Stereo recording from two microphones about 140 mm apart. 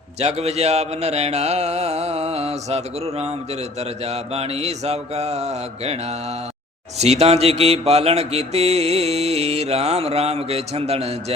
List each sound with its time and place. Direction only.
0.2 s mantra: 50° right (ahead or behind)